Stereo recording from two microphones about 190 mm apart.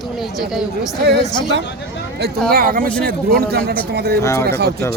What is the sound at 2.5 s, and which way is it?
Speech, 50° right (ahead or behind).